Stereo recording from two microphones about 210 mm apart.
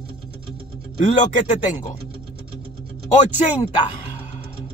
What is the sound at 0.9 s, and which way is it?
Speech, 35° left (ahead or behind).